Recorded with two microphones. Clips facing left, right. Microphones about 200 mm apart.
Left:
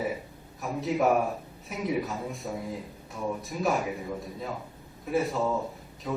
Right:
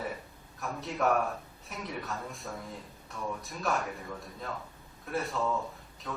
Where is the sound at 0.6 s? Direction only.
Centre (ahead or behind).